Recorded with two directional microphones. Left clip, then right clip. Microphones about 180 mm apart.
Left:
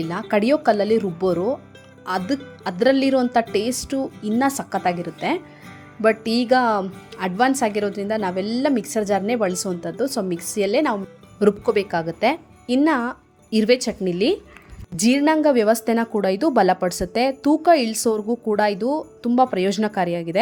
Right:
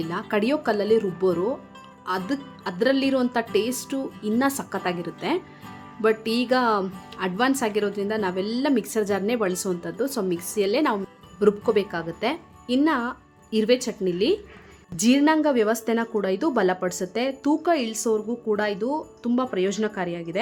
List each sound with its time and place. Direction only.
0.1 s a woman's voice: 20° left (ahead or behind)